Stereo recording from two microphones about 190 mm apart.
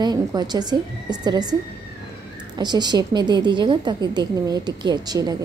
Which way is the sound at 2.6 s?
20° right (ahead or behind).